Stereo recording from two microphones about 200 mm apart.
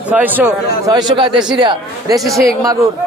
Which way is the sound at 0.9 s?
20° right (ahead or behind).